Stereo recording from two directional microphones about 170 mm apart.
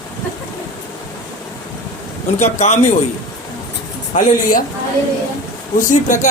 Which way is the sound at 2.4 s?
40° left (ahead or behind).